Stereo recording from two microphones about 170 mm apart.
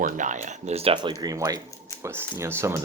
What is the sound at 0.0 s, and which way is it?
Speech, 50° right (ahead or behind).